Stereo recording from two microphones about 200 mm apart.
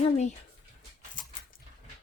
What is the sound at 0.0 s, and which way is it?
Speech, 35° left (ahead or behind).